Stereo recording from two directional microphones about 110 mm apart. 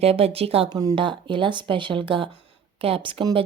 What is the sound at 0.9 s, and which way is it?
Speech, 50° right (ahead or behind).